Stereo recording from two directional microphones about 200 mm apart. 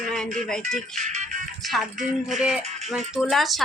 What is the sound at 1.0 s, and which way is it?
Music, 35° right (ahead or behind).